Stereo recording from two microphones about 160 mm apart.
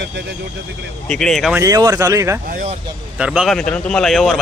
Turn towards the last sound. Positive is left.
turn(degrees=0)  # may be behind; listen again after turning